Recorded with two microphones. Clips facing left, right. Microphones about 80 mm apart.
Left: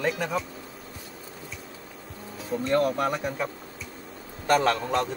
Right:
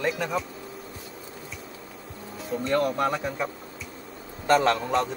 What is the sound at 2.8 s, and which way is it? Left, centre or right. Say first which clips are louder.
Speech: left 1 dB; right.